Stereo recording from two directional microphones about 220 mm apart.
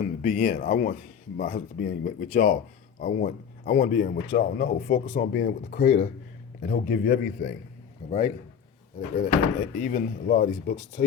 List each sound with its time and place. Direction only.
0.0 s speech: 35° left (ahead or behind)
9.1 s speech: 35° left (ahead or behind)